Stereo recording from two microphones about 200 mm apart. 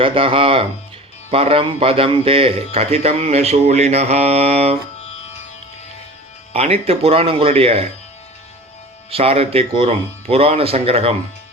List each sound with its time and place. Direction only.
0.0 s speech: 25° right (ahead or behind)
6.5 s speech: 30° right (ahead or behind)
9.0 s speech: 30° right (ahead or behind)